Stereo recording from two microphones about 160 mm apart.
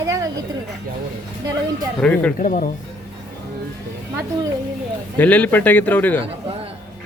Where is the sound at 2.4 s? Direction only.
55° left (ahead or behind).